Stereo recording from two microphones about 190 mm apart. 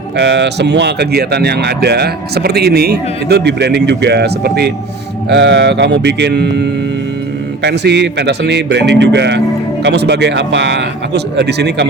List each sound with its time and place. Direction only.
0.2 s speech: 65° right (ahead or behind)